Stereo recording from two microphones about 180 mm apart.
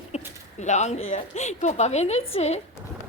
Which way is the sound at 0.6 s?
40° left (ahead or behind).